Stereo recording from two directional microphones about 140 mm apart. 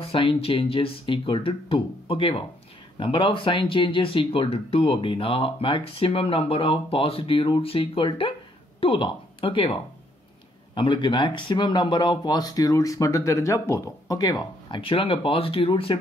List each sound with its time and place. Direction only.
0.0 s speech: 40° left (ahead or behind)